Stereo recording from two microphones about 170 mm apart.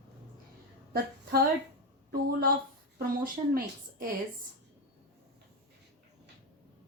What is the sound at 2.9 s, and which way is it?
A woman's voice, 60° right (ahead or behind).